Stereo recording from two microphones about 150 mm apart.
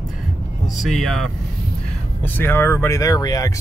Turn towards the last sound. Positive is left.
turn(degrees=25)  # may be behind; listen again after turning